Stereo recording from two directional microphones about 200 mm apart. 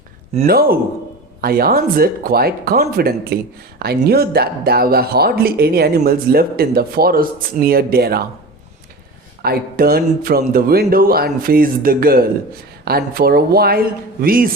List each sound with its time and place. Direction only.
0.4 s speech: 50° right (ahead or behind)
9.4 s speech: 50° right (ahead or behind)